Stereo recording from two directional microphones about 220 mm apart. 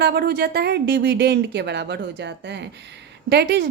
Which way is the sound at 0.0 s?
45° right (ahead or behind).